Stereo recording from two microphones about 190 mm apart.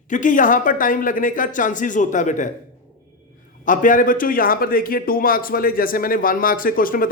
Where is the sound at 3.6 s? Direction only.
45° left (ahead or behind).